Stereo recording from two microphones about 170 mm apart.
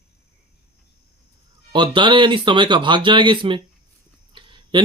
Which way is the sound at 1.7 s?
30° right (ahead or behind).